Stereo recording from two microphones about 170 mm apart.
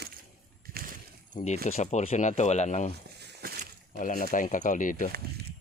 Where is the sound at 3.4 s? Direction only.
65° right (ahead or behind).